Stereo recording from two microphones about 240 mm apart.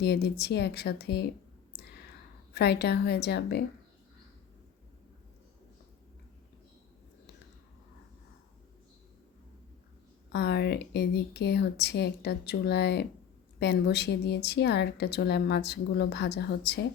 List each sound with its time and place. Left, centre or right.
0.0 s a woman's voice: left
2.5 s a woman's voice: left
10.3 s a woman's voice: left